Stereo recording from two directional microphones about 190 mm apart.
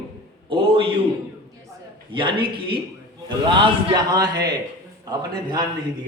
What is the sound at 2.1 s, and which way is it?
A man's voice, 25° right (ahead or behind).